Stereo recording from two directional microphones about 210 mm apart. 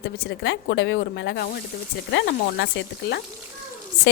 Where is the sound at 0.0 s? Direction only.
55° left (ahead or behind).